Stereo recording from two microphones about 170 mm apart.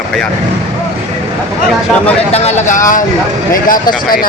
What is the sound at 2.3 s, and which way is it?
Speech, 40° left (ahead or behind).